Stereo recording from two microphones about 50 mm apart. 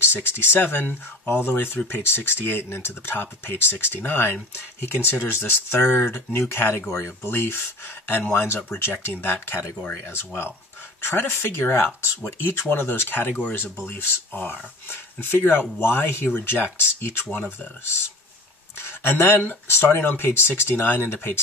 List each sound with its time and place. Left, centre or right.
0.4 s speech: left
6.9 s speech: left
7.3 s speech: left
13.4 s speech: left
18.8 s speech: left